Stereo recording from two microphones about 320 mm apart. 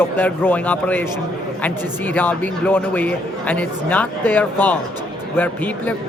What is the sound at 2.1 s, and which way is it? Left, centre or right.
A man's voice, centre.